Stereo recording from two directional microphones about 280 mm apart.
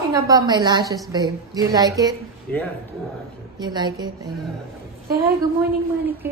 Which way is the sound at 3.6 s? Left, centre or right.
Centre.